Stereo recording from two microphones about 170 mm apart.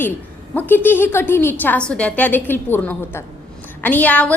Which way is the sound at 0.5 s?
10° left (ahead or behind).